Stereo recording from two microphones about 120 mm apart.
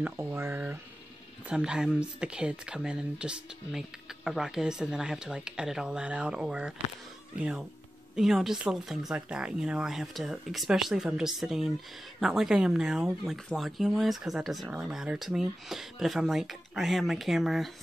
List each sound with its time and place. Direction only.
0.0 s speech: 20° right (ahead or behind)
1.5 s speech: 5° right (ahead or behind)